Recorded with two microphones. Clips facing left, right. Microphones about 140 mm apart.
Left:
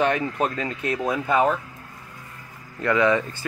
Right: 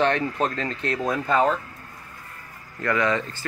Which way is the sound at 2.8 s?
20° left (ahead or behind).